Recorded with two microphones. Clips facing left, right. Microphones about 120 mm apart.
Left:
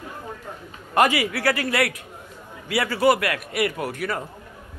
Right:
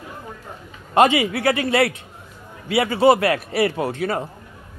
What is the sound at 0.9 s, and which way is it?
Speech, 25° right (ahead or behind).